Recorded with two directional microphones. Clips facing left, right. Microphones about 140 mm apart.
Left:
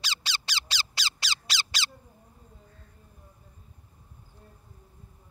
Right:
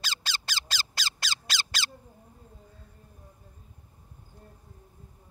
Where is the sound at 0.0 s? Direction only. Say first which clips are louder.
Even; 50° right (ahead or behind).